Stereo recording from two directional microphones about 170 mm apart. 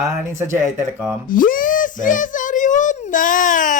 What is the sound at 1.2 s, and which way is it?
A child's voice, 55° left (ahead or behind).